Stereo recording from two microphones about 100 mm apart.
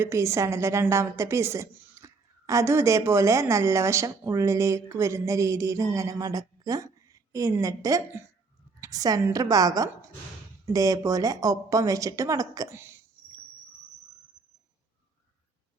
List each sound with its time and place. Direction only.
0.0 s a woman's voice: 25° right (ahead or behind)
12.7 s speech: 25° right (ahead or behind)